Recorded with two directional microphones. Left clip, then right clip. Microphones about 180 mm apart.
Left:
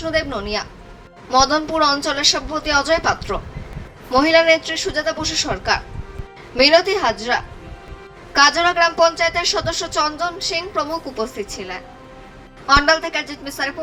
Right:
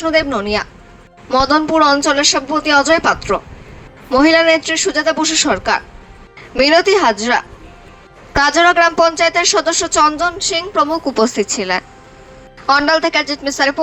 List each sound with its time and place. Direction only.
0.0 s a woman's voice: 45° right (ahead or behind)
12.9 s a woman's voice: 40° right (ahead or behind)